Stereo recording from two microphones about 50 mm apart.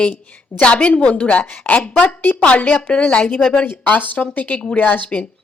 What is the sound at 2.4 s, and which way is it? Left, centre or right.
Speech, left.